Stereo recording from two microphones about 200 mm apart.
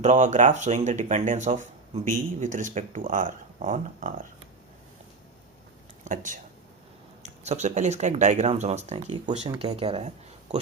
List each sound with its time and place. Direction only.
0.0 s speech: 35° right (ahead or behind)
6.1 s speech: 40° right (ahead or behind)